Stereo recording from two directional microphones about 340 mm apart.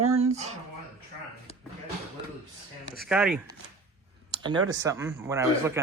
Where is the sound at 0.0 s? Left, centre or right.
Right.